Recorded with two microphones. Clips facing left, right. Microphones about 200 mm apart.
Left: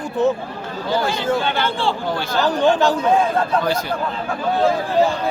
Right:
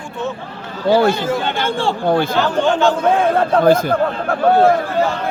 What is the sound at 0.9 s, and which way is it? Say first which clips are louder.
Speech: right 7 dB; 60° right (ahead or behind).